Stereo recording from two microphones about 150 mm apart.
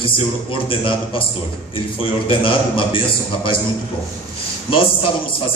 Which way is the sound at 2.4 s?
35° left (ahead or behind).